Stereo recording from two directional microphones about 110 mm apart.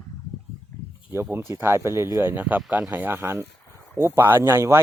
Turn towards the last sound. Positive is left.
turn(degrees=-25)  # may be behind; listen again after turning